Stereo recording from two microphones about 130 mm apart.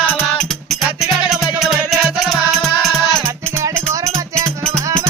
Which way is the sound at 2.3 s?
Centre (ahead or behind).